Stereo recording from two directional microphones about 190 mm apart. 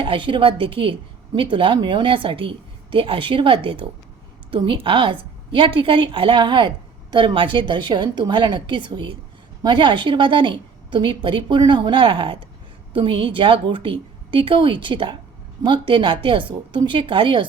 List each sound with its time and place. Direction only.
0.0 s a woman's voice: 25° right (ahead or behind)